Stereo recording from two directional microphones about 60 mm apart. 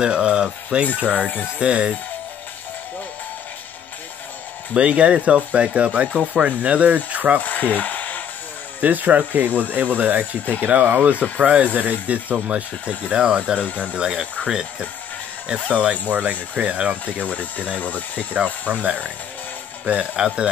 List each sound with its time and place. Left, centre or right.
0.0 s speech: centre
4.7 s speech: right
7.4 s a sound: left
8.8 s speech: right
17.0 s speech: left
18.3 s speech: right